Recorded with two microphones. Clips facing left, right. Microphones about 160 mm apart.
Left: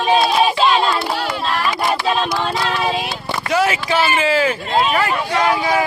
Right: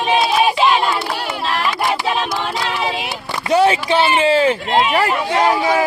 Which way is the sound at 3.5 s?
30° right (ahead or behind).